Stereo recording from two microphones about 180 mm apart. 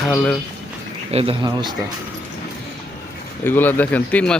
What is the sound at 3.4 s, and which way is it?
Speech, 10° left (ahead or behind).